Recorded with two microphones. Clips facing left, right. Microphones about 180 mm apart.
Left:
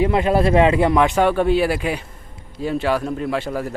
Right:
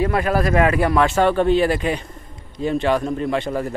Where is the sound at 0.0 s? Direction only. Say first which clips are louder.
Left 2 dB; 20° left (ahead or behind).